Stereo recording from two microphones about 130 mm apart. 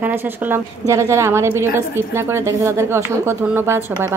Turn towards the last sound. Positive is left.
turn(degrees=-15)  # may be behind; listen again after turning